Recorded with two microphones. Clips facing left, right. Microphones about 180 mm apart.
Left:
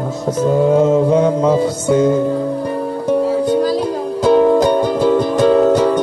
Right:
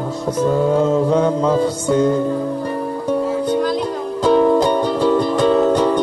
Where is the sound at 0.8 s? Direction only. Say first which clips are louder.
Left 3 dB; 5° left (ahead or behind).